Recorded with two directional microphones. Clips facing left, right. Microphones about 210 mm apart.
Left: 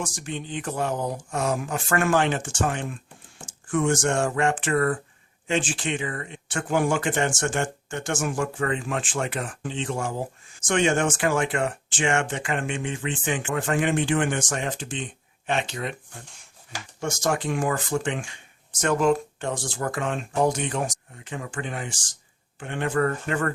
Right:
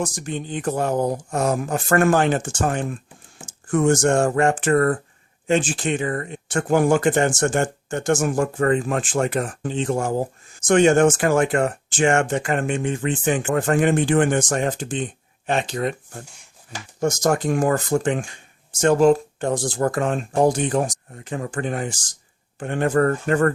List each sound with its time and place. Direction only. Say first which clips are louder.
0.0 s speech: right 5 dB; 40° right (ahead or behind)